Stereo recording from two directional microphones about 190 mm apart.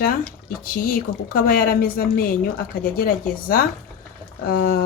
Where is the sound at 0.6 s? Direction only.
50° left (ahead or behind).